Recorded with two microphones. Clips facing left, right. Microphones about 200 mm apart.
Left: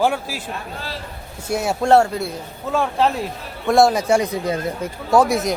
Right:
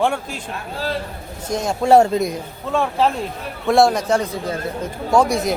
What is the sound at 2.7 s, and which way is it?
A man's voice, centre (ahead or behind).